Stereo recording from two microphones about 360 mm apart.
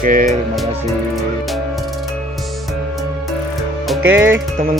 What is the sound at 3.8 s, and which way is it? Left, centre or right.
Music, centre.